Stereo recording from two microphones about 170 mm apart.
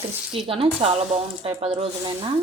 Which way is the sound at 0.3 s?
30° right (ahead or behind).